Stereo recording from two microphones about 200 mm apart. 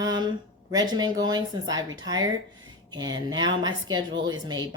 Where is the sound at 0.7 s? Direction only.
20° right (ahead or behind).